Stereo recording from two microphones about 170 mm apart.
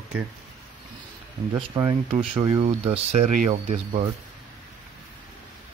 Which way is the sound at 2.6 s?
35° right (ahead or behind).